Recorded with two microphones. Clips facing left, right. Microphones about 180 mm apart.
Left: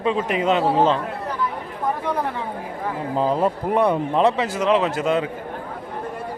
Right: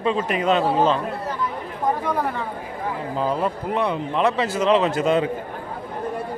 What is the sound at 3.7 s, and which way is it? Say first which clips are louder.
Speech: left 5 dB; 55° left (ahead or behind).